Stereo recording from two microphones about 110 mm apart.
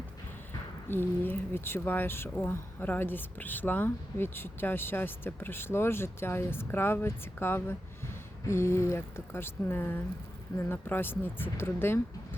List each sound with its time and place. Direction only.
0.9 s speech: 20° left (ahead or behind)